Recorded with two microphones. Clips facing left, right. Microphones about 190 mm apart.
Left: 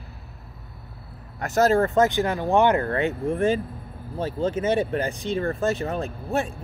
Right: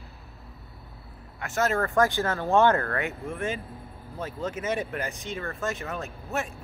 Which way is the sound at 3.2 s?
35° left (ahead or behind).